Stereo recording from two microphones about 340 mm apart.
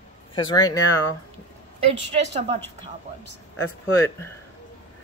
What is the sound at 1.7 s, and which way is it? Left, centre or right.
Speech, centre.